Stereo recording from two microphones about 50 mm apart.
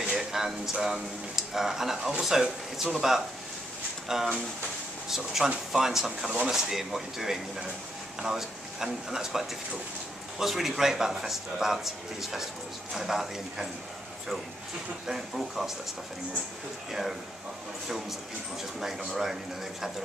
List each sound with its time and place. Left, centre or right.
0.0 s speech: centre
15.0 s speech: centre
18.8 s speech: centre